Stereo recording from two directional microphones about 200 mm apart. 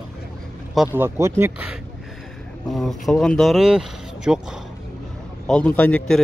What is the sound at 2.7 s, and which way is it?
Speech, centre (ahead or behind).